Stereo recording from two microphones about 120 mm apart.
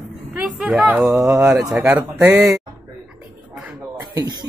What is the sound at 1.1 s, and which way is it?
Speech, 20° right (ahead or behind).